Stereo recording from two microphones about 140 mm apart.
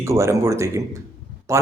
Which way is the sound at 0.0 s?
20° right (ahead or behind).